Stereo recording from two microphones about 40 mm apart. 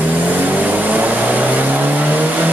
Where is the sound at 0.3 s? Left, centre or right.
Right.